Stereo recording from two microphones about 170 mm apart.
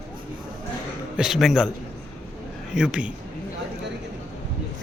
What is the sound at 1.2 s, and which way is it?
Speech, centre (ahead or behind).